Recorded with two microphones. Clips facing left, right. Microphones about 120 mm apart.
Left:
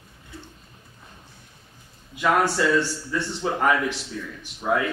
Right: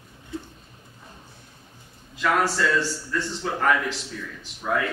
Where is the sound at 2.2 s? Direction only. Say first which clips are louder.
Left 2 dB; 15° left (ahead or behind).